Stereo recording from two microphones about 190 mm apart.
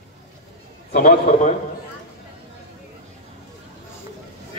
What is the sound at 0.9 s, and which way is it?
Speech, 45° left (ahead or behind).